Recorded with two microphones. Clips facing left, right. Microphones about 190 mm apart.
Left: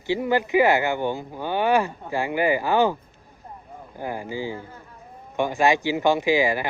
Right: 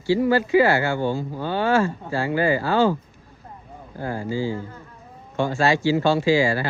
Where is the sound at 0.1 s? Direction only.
20° left (ahead or behind).